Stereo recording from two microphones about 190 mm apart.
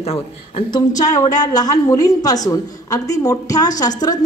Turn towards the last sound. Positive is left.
turn(degrees=20)  # may be behind; listen again after turning